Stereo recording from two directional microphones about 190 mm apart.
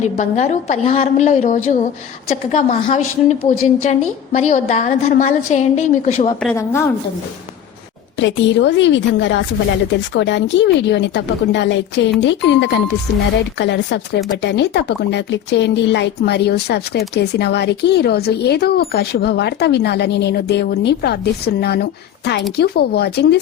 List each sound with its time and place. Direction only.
0.0 s a woman's voice: 40° left (ahead or behind)
8.2 s a woman's voice: 70° left (ahead or behind)